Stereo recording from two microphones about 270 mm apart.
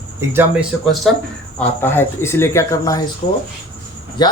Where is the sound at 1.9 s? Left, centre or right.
Centre.